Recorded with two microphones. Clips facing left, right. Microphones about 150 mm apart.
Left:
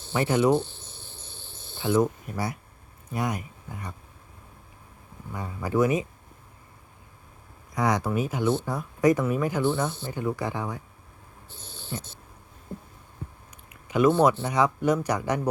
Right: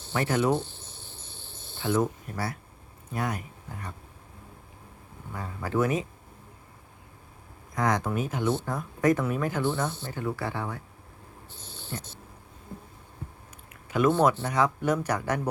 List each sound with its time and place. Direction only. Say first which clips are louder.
0.1 s speech: left 3 dB; 10° left (ahead or behind)
1.8 s speech: left 3 dB; 5° left (ahead or behind)
5.3 s speech: left 2 dB; 15° left (ahead or behind)
7.8 s speech: left 2 dB; 10° left (ahead or behind)
11.9 s speech: left 2 dB; 10° left (ahead or behind)
13.8 s a sound: left 3 dB; 10° left (ahead or behind)
14.3 s speech: left 2 dB; 15° left (ahead or behind)